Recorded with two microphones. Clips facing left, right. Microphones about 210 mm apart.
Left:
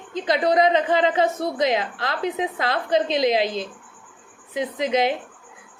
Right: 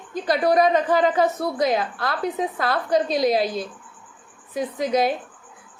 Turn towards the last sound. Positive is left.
turn(degrees=20)  # may be behind; listen again after turning